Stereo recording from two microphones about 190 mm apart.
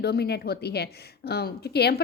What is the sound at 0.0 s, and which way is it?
A woman's voice, 60° left (ahead or behind).